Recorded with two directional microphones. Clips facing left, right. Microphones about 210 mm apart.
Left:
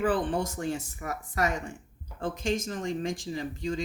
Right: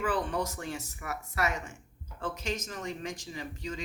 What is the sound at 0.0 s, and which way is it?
Speech, 35° left (ahead or behind).